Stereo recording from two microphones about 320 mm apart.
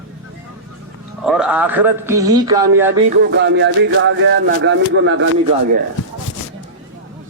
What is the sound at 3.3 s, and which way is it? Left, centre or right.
Speech, right.